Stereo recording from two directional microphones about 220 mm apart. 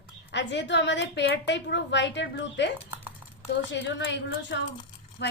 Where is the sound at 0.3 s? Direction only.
55° left (ahead or behind).